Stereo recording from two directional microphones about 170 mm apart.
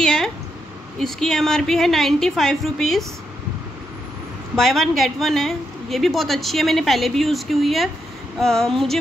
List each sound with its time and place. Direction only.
0.0 s a sound: centre (ahead or behind)
0.9 s a woman's voice: centre (ahead or behind)
4.6 s a woman's voice: centre (ahead or behind)